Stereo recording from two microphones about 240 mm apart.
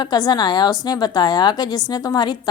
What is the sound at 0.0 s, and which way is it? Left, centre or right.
A woman's voice, centre.